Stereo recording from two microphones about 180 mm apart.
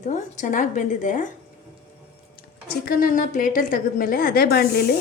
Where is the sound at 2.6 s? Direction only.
50° left (ahead or behind).